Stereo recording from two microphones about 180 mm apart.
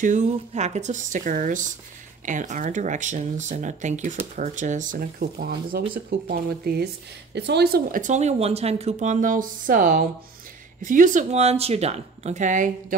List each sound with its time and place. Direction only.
0.0 s speech: 45° right (ahead or behind); by 8.0 s 60° right (ahead or behind)
8.0 s speech: 40° right (ahead or behind)